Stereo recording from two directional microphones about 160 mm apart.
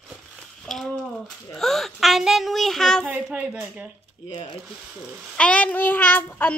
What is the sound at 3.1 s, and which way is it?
Speech, 10° right (ahead or behind).